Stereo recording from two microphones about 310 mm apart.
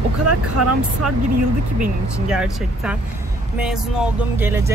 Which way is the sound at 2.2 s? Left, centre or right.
Centre.